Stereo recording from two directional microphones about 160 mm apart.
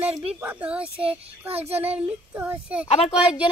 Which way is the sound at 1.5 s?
40° right (ahead or behind).